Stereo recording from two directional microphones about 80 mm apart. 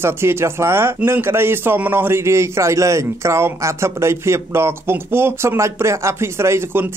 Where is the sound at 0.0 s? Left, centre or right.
Right.